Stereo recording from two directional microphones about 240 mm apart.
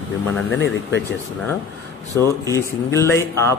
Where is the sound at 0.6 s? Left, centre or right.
Left.